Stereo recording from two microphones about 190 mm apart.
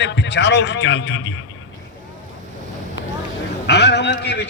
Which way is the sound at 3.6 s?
65° left (ahead or behind).